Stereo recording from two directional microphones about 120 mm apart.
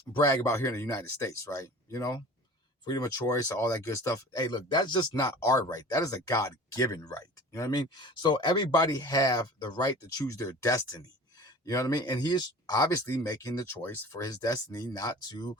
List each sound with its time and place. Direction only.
0.2 s speech: 25° left (ahead or behind)
14.2 s speech: 30° left (ahead or behind)